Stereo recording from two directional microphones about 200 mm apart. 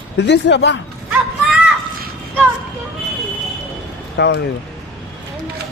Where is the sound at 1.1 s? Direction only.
Centre (ahead or behind).